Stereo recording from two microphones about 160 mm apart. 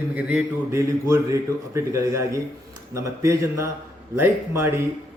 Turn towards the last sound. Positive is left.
turn(degrees=-15)  # may be behind; listen again after turning